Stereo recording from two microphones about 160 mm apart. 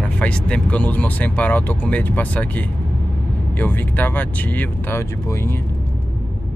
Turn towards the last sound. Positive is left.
turn(degrees=10)  # may be behind; listen again after turning